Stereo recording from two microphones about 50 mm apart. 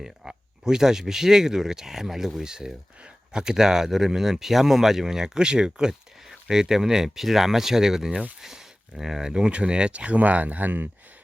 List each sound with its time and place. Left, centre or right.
0.0 s speech: centre; by 10.8 s right